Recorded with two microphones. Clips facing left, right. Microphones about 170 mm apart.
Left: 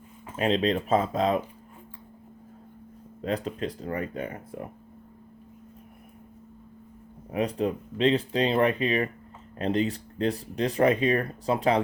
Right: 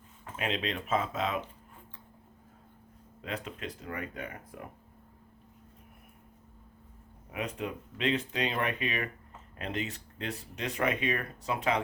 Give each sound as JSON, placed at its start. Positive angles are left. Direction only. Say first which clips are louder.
{"t": 0.3, "sound": "speech", "louder": "left 9 dB", "side_deg": 35}
{"t": 3.2, "sound": "speech", "louder": "left 9 dB", "side_deg": 35}
{"t": 7.3, "sound": "speech", "louder": "left 9 dB", "side_deg": 35}